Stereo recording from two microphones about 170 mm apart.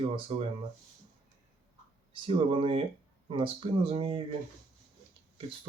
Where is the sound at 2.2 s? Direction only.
30° right (ahead or behind).